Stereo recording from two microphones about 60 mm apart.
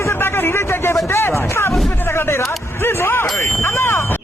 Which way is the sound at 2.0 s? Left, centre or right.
Left.